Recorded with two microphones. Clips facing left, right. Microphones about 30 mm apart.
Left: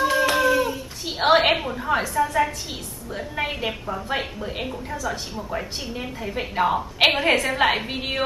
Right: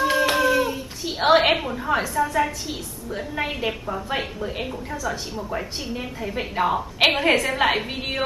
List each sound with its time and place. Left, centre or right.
0.1 s a sound: centre
0.4 s hands: centre
1.0 s a woman's voice: centre